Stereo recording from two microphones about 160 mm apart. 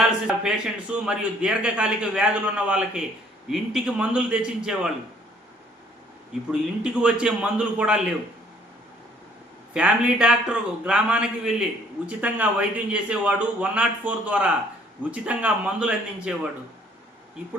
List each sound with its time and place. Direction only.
0.3 s a man's voice: 5° right (ahead or behind)
6.5 s a man's voice: 5° right (ahead or behind)
9.7 s a man's voice: 5° right (ahead or behind)